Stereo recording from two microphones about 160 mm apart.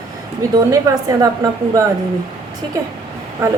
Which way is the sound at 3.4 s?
20° right (ahead or behind).